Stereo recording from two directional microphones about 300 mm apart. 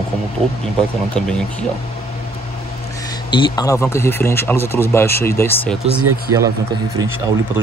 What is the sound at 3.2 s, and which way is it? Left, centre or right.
Speech, centre.